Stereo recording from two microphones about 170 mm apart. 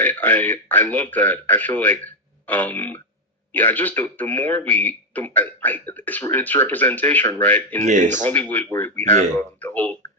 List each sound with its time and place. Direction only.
0.0 s a man's voice: 10° left (ahead or behind)
7.9 s speech: 45° right (ahead or behind)
8.2 s a man's voice: 10° left (ahead or behind)